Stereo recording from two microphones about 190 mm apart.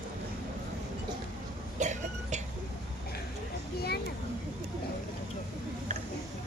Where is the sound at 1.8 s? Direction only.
40° right (ahead or behind).